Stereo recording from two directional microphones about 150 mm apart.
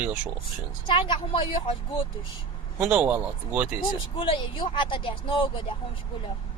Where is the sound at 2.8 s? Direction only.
10° right (ahead or behind).